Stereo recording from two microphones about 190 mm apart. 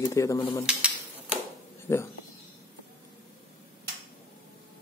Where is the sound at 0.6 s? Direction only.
5° right (ahead or behind).